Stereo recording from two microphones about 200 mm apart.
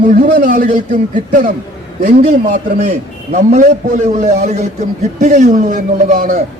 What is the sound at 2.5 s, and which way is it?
A man's voice, 35° right (ahead or behind).